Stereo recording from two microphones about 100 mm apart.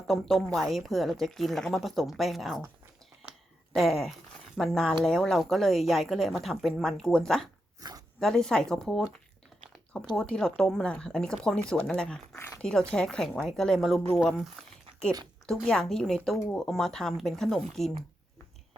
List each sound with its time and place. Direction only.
0.1 s speech: centre (ahead or behind)
3.8 s speech: centre (ahead or behind)
7.8 s a sound: 40° right (ahead or behind)
8.2 s speech: 5° left (ahead or behind)
10.2 s speech: 5° left (ahead or behind)
15.6 s speech: 5° left (ahead or behind)